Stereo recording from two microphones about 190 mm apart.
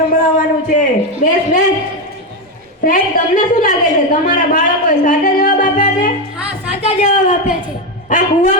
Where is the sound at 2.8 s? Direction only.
45° left (ahead or behind).